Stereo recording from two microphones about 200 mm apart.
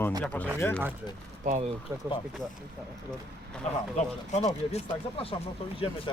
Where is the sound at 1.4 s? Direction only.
40° right (ahead or behind).